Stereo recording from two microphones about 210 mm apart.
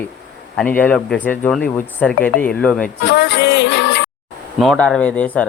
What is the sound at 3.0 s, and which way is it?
Music, 55° left (ahead or behind).